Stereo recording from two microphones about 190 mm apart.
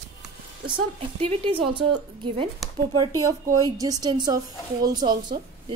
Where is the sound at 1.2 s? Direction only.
30° right (ahead or behind).